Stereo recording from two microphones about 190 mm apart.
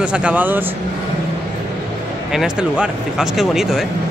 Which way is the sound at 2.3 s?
5° right (ahead or behind).